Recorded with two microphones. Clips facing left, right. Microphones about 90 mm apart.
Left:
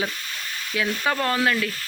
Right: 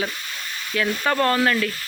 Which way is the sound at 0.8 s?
5° left (ahead or behind).